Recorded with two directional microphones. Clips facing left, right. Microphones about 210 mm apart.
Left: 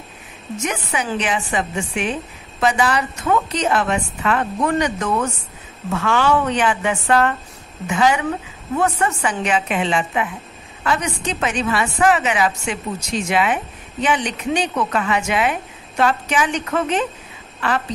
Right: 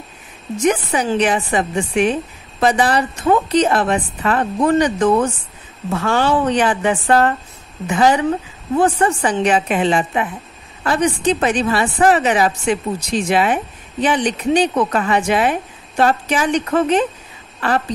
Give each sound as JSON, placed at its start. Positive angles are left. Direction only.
{"t": 0.6, "sound": "a woman's voice", "side_deg": -35}